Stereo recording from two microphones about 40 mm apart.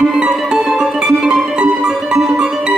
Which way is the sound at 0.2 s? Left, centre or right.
Right.